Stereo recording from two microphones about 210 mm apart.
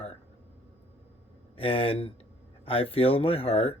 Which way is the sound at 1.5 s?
25° left (ahead or behind).